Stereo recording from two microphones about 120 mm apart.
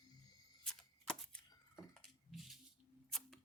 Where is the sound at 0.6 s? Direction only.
5° left (ahead or behind).